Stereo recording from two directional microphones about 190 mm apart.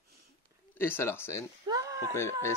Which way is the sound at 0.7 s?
10° left (ahead or behind).